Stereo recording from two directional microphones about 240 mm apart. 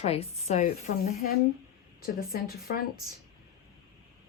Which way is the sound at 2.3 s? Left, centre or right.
Left.